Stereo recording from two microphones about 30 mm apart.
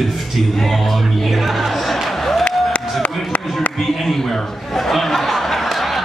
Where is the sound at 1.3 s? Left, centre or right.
Centre.